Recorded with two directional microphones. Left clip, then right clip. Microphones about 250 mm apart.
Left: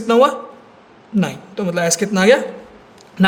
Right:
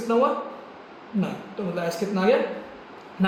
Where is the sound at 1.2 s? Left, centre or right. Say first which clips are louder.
Left 8 dB; left.